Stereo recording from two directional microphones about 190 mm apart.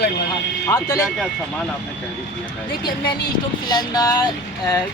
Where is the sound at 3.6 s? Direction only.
20° left (ahead or behind).